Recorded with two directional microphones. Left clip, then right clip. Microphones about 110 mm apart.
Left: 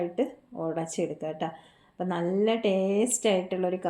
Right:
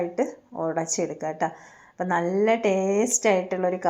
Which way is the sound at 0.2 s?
10° left (ahead or behind).